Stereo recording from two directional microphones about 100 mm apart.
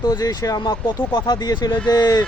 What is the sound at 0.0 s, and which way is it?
Speech, 40° left (ahead or behind).